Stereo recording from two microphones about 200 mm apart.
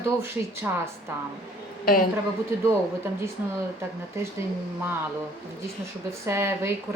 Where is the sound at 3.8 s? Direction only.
15° right (ahead or behind).